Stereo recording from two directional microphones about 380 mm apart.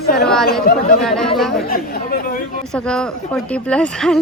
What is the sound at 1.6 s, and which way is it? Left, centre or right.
Speech, left.